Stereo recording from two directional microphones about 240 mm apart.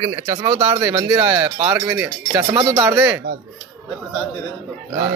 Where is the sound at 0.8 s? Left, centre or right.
Centre.